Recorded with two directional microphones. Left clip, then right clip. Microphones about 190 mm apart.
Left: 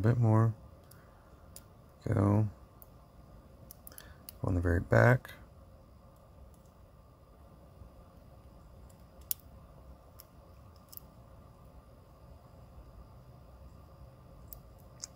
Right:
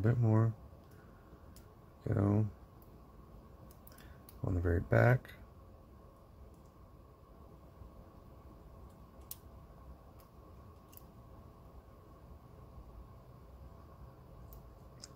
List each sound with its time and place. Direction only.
0.0 s speech: 20° left (ahead or behind)
2.0 s speech: 20° left (ahead or behind)
4.5 s speech: 15° left (ahead or behind)